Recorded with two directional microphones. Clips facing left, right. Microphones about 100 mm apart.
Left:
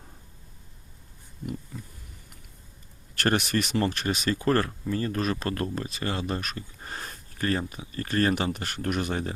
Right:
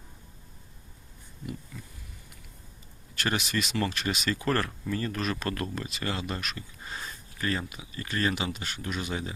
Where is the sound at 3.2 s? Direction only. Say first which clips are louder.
Left 5 dB; 50° left (ahead or behind).